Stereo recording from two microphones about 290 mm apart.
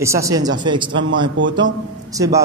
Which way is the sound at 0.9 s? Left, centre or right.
Right.